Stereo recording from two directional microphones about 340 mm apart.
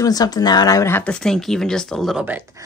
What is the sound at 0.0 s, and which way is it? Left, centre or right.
A woman's voice, centre.